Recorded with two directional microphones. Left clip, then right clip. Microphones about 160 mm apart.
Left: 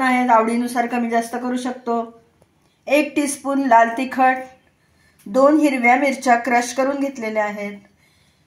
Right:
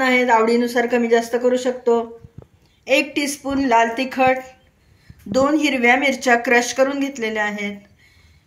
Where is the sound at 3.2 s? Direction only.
25° left (ahead or behind).